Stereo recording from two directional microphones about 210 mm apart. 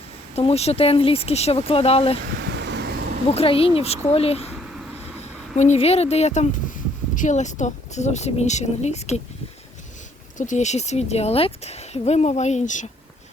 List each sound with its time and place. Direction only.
0.3 s speech: 30° left (ahead or behind)
2.3 s vehicle: 60° right (ahead or behind)
3.2 s speech: 25° left (ahead or behind)
5.5 s speech: 30° left (ahead or behind)
10.3 s speech: 35° left (ahead or behind)